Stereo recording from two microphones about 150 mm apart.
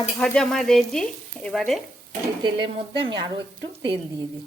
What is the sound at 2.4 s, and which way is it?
Speech, 35° right (ahead or behind).